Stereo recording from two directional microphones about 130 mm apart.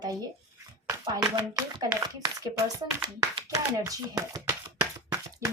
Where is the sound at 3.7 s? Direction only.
30° right (ahead or behind).